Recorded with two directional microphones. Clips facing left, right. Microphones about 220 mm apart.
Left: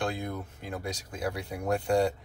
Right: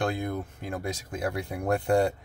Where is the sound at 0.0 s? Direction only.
50° right (ahead or behind).